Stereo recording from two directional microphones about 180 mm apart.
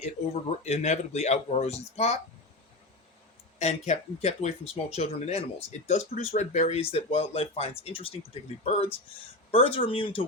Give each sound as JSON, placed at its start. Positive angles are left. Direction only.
{"t": 0.6, "sound": "speech", "side_deg": 40}
{"t": 3.6, "sound": "speech", "side_deg": 35}